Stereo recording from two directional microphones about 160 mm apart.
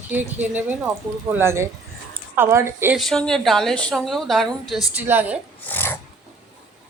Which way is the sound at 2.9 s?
5° left (ahead or behind).